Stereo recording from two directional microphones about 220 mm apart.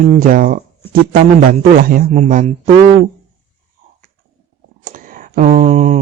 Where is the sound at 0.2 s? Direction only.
40° right (ahead or behind).